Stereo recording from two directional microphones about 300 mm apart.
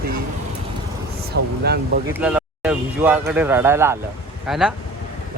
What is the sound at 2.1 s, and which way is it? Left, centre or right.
Speech, centre.